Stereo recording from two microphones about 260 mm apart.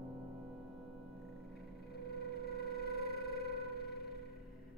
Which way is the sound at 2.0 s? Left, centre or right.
Left.